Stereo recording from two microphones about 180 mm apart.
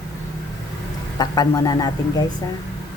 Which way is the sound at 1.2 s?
20° left (ahead or behind).